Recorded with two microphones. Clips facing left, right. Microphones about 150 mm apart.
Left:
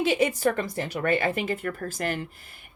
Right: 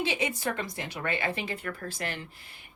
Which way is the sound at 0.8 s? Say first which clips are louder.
Left 7 dB; 45° left (ahead or behind).